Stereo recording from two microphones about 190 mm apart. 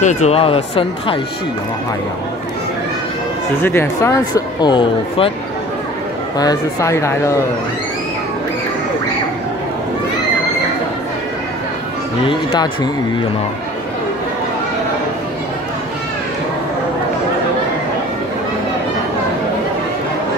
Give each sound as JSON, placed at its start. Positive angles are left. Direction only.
{"t": 0.0, "sound": "speech", "side_deg": 40}
{"t": 3.6, "sound": "speech", "side_deg": 15}
{"t": 6.3, "sound": "speech", "side_deg": 20}
{"t": 12.3, "sound": "speech", "side_deg": 25}